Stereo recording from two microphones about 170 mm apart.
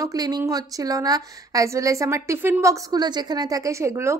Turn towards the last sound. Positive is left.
turn(degrees=-15)  # may be behind; listen again after turning